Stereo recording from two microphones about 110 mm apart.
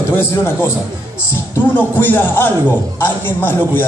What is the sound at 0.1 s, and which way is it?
Speech, 20° left (ahead or behind).